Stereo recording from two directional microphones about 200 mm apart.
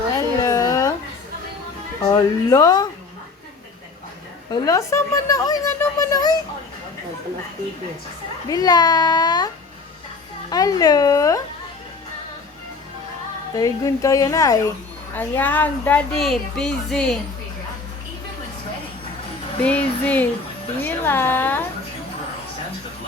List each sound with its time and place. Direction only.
0.1 s a sound: 15° left (ahead or behind)
2.1 s a child's voice: 20° left (ahead or behind)
4.5 s a child's voice: 15° left (ahead or behind)
8.4 s a child's voice: 20° left (ahead or behind)
10.5 s speech: 20° left (ahead or behind)
13.6 s speech: 15° left (ahead or behind)
19.6 s speech: 5° left (ahead or behind)